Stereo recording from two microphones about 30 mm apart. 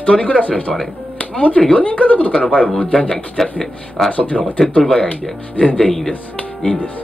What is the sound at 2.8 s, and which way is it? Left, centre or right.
Speech, left.